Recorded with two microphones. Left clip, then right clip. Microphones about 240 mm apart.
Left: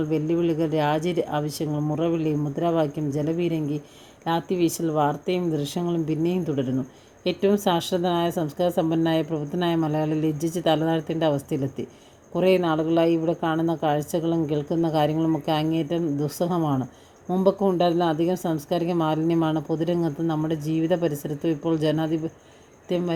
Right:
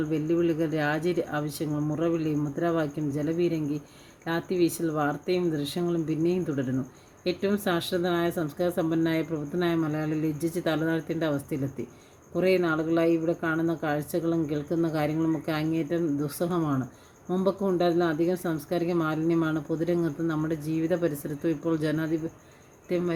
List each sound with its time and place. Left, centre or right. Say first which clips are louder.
0.1 s speech: left 2 dB; left